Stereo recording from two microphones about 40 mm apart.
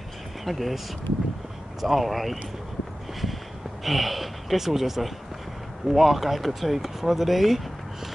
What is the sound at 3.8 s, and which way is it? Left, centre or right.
Speech, centre.